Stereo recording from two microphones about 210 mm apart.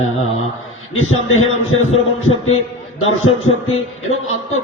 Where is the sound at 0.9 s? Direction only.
80° left.